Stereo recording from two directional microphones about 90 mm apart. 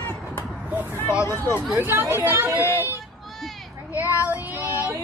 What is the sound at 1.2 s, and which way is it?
Speech, 25° left (ahead or behind).